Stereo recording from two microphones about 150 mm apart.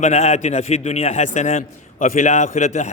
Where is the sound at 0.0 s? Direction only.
45° left (ahead or behind).